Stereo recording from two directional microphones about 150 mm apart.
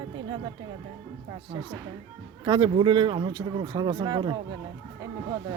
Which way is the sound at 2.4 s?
30° right (ahead or behind).